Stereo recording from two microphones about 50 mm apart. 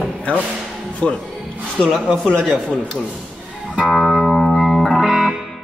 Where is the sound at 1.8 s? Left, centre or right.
Centre.